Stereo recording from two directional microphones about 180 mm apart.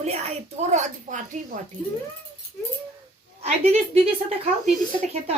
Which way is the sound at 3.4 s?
35° right (ahead or behind).